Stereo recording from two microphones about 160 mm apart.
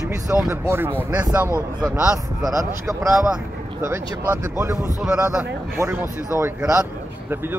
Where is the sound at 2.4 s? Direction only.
20° right (ahead or behind).